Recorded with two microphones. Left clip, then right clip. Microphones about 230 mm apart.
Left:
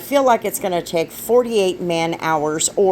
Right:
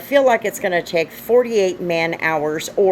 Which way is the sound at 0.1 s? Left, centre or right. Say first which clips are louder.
Right 1 dB; left.